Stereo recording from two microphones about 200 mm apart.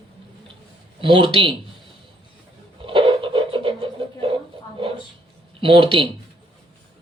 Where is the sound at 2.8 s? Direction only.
25° right (ahead or behind).